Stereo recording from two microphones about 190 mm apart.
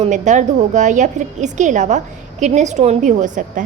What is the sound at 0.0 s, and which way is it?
A woman's voice, 40° right (ahead or behind).